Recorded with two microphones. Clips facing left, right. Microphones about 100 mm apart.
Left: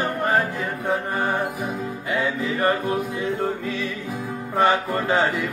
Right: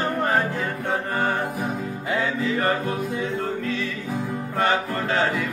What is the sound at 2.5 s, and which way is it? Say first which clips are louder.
Music: left 2 dB; 20° left (ahead or behind).